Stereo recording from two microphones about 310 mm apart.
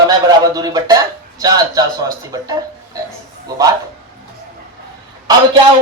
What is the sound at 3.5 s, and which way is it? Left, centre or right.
Speech, centre.